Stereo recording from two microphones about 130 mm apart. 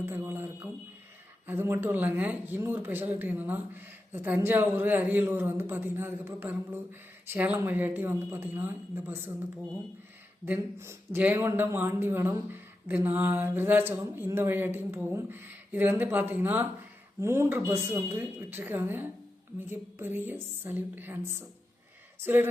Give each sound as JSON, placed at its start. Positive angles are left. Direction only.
{"t": 0.0, "sound": "speech", "side_deg": -15}
{"t": 10.4, "sound": "speech", "side_deg": -15}